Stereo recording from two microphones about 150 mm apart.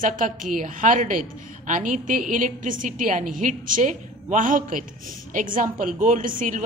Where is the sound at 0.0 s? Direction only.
60° right (ahead or behind).